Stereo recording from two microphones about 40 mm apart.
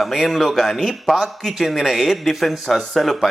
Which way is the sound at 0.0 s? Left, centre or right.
Centre.